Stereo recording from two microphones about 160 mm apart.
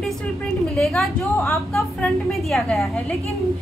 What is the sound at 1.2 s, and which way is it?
Speech, 15° left (ahead or behind).